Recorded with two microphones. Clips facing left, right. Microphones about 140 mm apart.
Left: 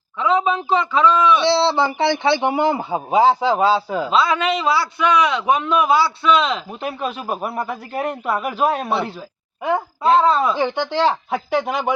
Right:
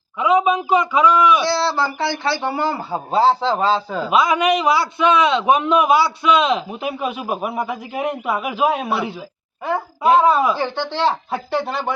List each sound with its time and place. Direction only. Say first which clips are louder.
0.2 s a man's voice: right 2 dB; 15° right (ahead or behind)
1.4 s a man's voice: left 3 dB; 25° left (ahead or behind)
4.1 s a man's voice: right 3 dB; 15° right (ahead or behind)
6.7 s a man's voice: right 1 dB; 5° right (ahead or behind)
10.0 s a man's voice: right 2 dB; 15° right (ahead or behind)
10.6 s speech: left 2 dB; 15° left (ahead or behind)